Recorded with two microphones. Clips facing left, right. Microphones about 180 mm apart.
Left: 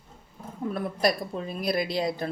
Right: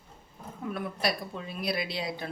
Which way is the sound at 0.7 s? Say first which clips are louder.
Left 5 dB; 40° left (ahead or behind).